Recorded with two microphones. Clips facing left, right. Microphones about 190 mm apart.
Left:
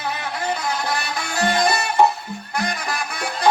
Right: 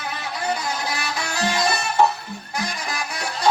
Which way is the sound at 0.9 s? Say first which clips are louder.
Left 2 dB; 55° left (ahead or behind).